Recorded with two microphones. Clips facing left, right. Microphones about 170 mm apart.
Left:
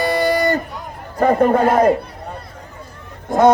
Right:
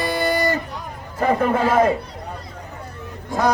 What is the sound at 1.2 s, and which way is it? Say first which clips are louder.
Speech: left 5 dB; 40° left (ahead or behind).